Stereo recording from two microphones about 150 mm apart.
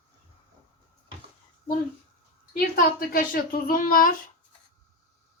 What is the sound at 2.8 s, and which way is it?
Speech, 70° left (ahead or behind).